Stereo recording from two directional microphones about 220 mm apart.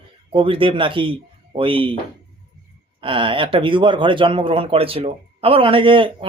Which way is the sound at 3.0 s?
25° right (ahead or behind).